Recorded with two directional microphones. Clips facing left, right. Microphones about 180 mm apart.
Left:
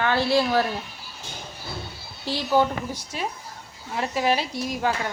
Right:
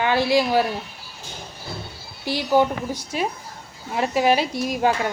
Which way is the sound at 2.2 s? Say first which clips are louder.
Right 3 dB; 15° right (ahead or behind).